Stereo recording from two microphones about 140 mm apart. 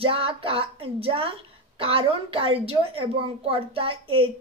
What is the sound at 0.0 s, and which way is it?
A woman's voice, 40° right (ahead or behind).